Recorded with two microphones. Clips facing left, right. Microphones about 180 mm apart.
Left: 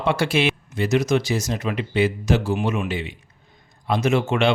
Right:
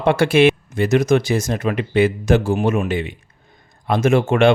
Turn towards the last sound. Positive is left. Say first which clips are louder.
# right 5 dB
turn(degrees=-50)  # may be behind; listen again after turning